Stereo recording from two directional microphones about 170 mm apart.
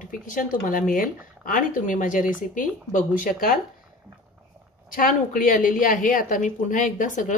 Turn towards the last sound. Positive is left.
turn(degrees=50)  # may be behind; listen again after turning